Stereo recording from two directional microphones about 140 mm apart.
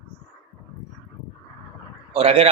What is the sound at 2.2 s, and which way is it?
Speech, 45° right (ahead or behind).